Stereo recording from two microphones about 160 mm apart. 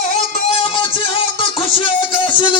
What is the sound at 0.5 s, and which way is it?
Music, 35° left (ahead or behind).